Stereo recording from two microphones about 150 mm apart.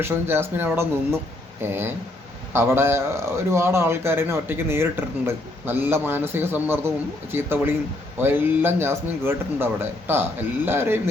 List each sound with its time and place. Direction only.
0.0 s a man's voice: 15° right (ahead or behind)